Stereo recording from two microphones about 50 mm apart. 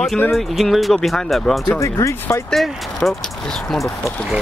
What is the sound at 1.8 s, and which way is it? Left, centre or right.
Speech, left.